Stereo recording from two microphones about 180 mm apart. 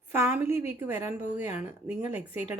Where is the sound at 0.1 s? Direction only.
15° right (ahead or behind).